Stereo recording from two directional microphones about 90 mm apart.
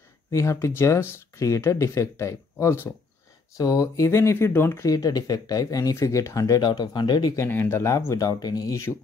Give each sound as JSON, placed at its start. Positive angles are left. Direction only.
{"t": 0.3, "sound": "speech", "side_deg": 35}
{"t": 4.8, "sound": "speech", "side_deg": 40}
{"t": 7.3, "sound": "speech", "side_deg": 25}
{"t": 8.1, "sound": "speech", "side_deg": 40}